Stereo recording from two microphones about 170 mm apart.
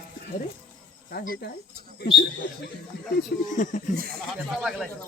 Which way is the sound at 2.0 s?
75° left (ahead or behind).